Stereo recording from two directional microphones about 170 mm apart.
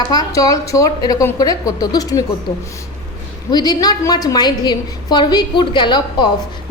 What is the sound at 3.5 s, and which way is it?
A woman's voice, 25° left (ahead or behind).